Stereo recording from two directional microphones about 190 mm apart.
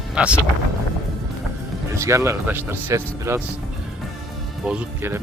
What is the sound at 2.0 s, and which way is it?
Speech, 15° right (ahead or behind).